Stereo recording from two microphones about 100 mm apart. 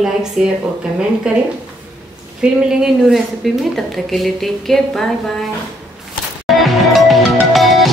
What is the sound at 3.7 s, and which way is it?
A woman's voice, centre (ahead or behind).